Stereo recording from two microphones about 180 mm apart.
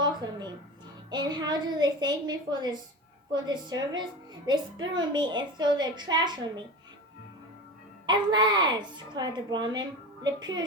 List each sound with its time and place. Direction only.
0.0 s a sound: 25° right (ahead or behind)
1.1 s a woman's voice: 25° right (ahead or behind)
8.0 s a woman's voice: 25° right (ahead or behind)